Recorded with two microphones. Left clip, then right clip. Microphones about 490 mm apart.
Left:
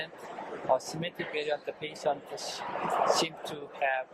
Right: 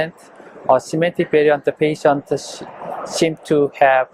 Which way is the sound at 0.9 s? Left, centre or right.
Right.